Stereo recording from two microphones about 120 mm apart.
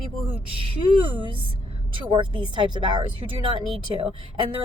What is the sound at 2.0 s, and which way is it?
Speech, 45° right (ahead or behind).